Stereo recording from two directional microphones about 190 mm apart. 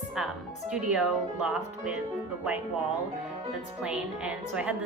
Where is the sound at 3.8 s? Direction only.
5° right (ahead or behind).